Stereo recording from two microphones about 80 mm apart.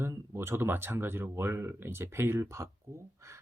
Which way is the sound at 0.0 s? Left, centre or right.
Right.